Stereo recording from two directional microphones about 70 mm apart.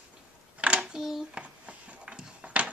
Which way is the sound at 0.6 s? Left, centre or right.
Centre.